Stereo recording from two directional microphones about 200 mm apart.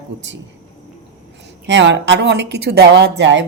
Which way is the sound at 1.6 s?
65° right (ahead or behind).